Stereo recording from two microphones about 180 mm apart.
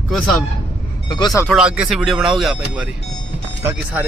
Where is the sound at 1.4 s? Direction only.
5° right (ahead or behind).